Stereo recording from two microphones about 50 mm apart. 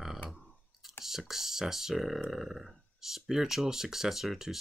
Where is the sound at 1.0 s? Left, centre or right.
Centre.